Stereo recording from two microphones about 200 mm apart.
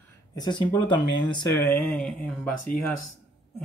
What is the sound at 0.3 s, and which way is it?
Speech, 20° left (ahead or behind).